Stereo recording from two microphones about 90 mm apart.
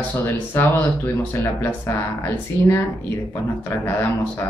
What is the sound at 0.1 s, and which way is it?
Speech, 25° left (ahead or behind).